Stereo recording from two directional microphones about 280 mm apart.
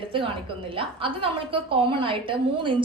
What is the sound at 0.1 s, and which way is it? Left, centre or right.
A woman's voice, centre.